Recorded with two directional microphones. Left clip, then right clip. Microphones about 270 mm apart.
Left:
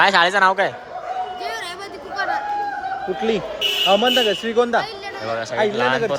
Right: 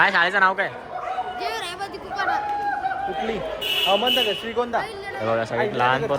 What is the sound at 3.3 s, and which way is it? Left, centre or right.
Speech, left.